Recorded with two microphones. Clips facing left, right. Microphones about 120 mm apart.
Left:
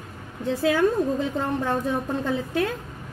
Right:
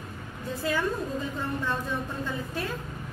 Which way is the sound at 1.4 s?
50° left (ahead or behind).